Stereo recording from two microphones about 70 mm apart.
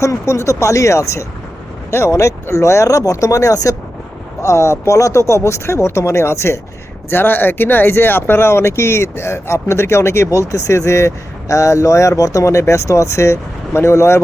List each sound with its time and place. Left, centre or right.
0.0 s speech: left
4.4 s speech: left
7.1 s speech: left